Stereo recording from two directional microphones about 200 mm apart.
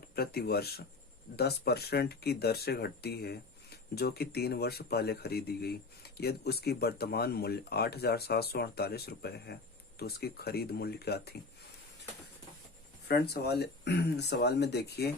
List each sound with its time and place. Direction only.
0.2 s speech: 50° left (ahead or behind)
13.1 s speech: 55° left (ahead or behind)